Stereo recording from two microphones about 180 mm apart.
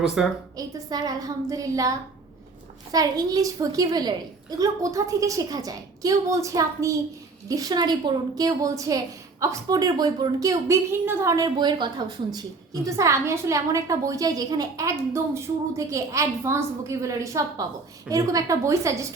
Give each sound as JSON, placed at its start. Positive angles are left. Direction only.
{"t": 0.2, "sound": "a woman's voice", "side_deg": 0}
{"t": 0.5, "sound": "a woman's voice", "side_deg": -20}